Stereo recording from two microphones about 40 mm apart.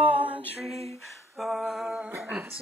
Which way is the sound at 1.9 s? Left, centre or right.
Right.